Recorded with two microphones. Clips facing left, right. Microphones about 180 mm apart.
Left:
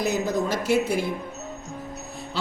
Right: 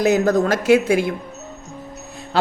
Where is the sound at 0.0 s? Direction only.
85° right.